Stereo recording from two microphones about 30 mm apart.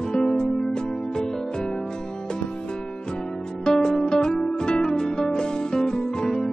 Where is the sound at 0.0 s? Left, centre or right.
Left.